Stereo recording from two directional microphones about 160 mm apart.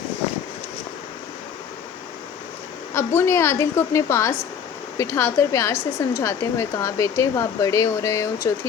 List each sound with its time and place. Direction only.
2.9 s a woman's voice: 15° left (ahead or behind)